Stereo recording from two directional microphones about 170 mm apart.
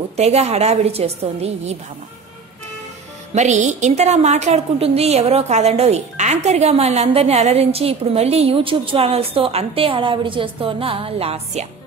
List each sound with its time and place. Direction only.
0.1 s a woman's voice: 40° right (ahead or behind)
3.3 s a woman's voice: 45° right (ahead or behind)